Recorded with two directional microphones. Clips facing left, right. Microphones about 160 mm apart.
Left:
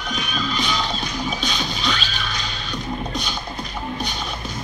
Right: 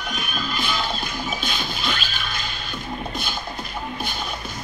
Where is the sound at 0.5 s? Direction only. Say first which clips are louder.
Left 1 dB; 5° right (ahead or behind).